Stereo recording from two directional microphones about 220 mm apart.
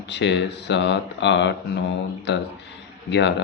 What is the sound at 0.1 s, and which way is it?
Speech, 55° left (ahead or behind).